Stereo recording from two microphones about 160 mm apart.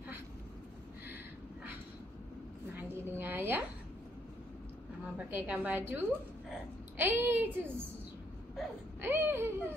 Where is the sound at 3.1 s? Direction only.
15° right (ahead or behind).